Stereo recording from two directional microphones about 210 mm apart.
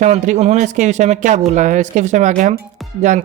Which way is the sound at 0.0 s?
35° right (ahead or behind).